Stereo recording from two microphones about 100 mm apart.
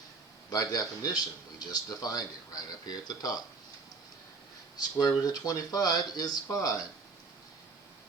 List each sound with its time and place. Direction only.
0.5 s speech: 35° left (ahead or behind)
4.9 s speech: 40° left (ahead or behind)